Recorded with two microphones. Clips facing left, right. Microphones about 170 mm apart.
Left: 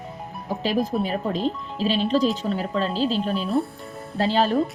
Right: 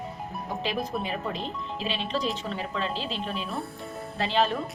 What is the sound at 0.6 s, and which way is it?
A woman's voice, 35° left (ahead or behind).